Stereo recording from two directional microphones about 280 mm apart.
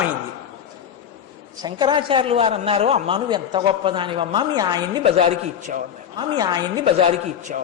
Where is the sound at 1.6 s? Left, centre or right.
Centre.